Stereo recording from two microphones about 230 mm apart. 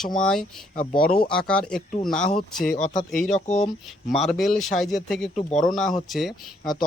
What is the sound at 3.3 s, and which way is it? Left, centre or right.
Speech, left.